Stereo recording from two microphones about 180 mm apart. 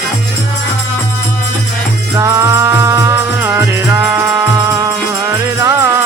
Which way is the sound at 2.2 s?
15° right (ahead or behind).